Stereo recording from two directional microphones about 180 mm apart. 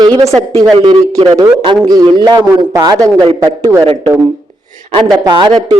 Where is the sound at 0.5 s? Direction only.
25° right (ahead or behind).